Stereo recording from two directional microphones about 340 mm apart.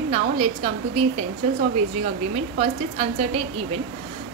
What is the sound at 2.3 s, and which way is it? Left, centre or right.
Speech, centre.